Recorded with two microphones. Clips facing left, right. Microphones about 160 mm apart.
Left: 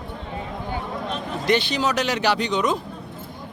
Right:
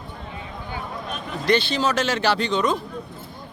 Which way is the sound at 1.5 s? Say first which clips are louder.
Right 1 dB; 15° left (ahead or behind).